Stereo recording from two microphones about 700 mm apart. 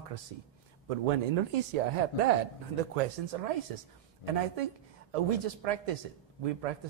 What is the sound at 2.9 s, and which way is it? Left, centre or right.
A man's voice, right.